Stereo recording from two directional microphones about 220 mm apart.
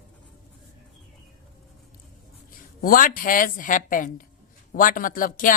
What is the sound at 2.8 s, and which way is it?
A woman's voice, 40° left (ahead or behind).